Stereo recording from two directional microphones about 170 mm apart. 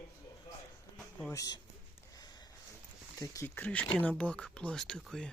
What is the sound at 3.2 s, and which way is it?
Speech, 15° left (ahead or behind).